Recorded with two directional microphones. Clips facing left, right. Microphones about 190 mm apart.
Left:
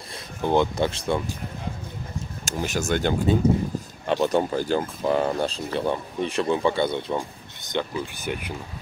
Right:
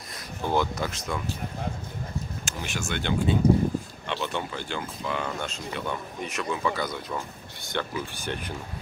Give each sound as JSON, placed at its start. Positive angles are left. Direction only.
{"t": 0.4, "sound": "speech", "side_deg": 20}
{"t": 2.4, "sound": "speech", "side_deg": 40}
{"t": 8.3, "sound": "speech", "side_deg": 10}